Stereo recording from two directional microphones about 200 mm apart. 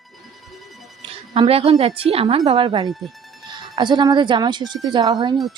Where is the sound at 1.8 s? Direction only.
30° right (ahead or behind).